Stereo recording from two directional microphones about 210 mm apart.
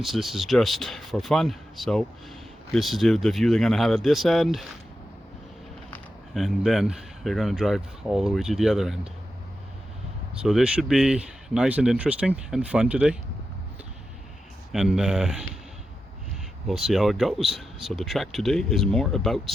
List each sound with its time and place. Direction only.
0.0 s speech: centre (ahead or behind)
5.9 s speech: centre (ahead or behind)
10.4 s speech: centre (ahead or behind)
14.7 s speech: centre (ahead or behind)
16.6 s speech: centre (ahead or behind)